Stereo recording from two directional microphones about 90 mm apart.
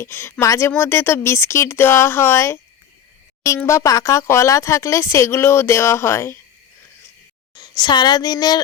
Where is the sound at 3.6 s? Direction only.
35° left (ahead or behind).